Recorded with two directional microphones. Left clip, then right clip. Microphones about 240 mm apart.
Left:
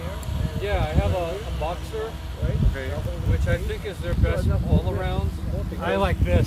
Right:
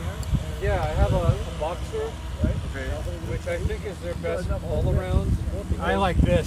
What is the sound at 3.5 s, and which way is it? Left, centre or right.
Speech, centre.